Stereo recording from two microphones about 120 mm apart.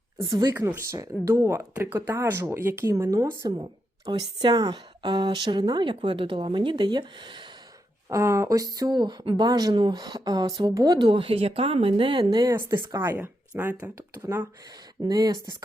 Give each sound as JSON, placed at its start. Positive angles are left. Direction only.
{"t": 0.2, "sound": "speech", "side_deg": -30}
{"t": 0.5, "sound": "speech", "side_deg": -20}
{"t": 8.1, "sound": "speech", "side_deg": -25}
{"t": 13.0, "sound": "speech", "side_deg": -20}
{"t": 15.0, "sound": "speech", "side_deg": -35}